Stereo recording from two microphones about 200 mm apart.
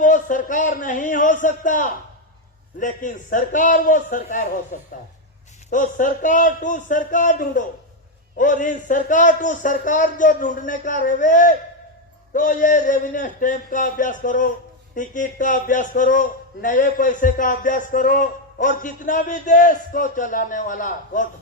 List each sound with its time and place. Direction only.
0.0 s a man's voice: 40° left (ahead or behind)